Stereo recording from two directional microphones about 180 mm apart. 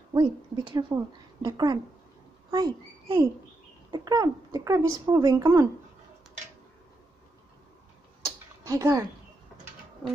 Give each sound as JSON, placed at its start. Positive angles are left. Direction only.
{"t": 0.1, "sound": "speech", "side_deg": -25}
{"t": 8.6, "sound": "speech", "side_deg": -15}